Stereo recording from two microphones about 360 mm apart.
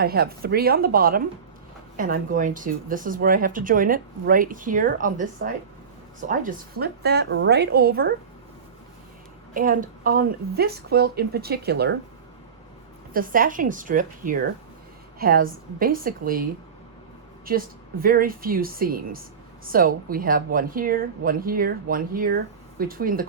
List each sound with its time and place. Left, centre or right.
0.0 s speech: right
9.6 s speech: right
13.1 s speech: right
17.5 s speech: right